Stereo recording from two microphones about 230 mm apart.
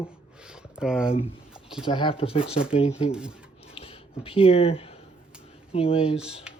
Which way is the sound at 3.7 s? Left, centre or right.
Left.